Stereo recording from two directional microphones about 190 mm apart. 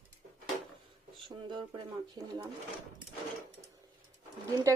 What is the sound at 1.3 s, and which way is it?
Speech, 25° right (ahead or behind).